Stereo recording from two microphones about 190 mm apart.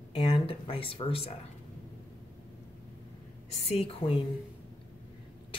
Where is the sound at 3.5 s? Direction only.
30° left (ahead or behind).